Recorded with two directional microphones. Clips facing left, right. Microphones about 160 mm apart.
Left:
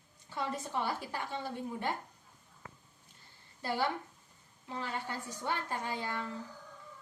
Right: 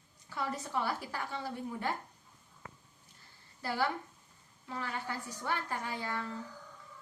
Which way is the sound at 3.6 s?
20° left (ahead or behind).